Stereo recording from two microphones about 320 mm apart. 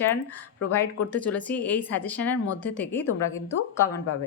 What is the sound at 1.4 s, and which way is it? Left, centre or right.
A woman's voice, centre.